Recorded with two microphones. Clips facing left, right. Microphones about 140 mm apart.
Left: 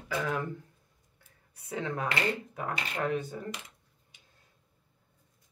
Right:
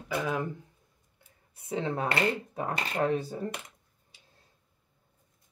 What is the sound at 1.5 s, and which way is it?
Speech, 25° right (ahead or behind).